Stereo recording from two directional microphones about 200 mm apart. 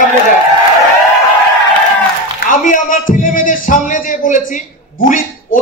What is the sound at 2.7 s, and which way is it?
Speech, 40° left (ahead or behind).